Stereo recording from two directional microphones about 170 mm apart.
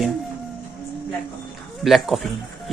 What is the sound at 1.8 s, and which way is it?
Speech, centre (ahead or behind).